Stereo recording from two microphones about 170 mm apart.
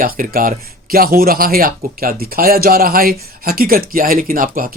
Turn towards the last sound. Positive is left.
turn(degrees=-55)  # may be behind; listen again after turning